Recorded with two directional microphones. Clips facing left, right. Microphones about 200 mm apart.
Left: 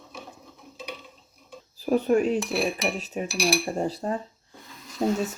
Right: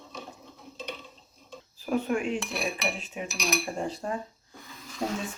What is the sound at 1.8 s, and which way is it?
Speech, 35° left (ahead or behind).